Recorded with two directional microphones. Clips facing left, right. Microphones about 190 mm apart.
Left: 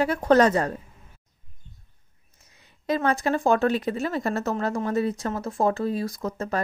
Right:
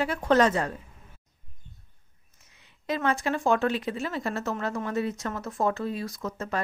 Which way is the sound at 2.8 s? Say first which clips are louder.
Left 3 dB; 40° left (ahead or behind).